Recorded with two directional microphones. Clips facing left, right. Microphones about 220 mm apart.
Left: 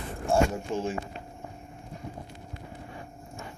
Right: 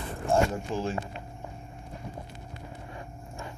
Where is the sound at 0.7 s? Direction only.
20° left (ahead or behind).